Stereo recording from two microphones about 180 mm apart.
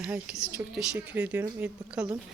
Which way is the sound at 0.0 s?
5° right (ahead or behind).